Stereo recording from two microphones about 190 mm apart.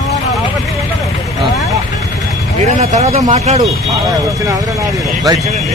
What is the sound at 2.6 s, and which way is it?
Speech, 35° right (ahead or behind).